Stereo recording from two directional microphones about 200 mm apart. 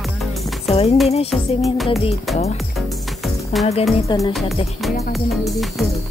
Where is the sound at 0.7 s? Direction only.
30° left (ahead or behind).